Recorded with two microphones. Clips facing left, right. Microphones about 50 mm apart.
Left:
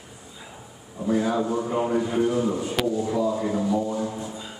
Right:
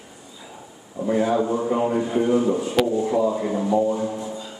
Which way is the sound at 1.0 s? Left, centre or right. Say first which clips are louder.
Right 3 dB; right.